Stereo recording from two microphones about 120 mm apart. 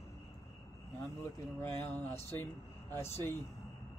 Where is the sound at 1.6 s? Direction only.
15° left (ahead or behind).